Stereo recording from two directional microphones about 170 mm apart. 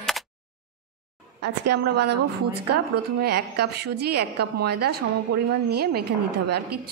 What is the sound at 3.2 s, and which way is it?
A woman's voice, 70° right (ahead or behind).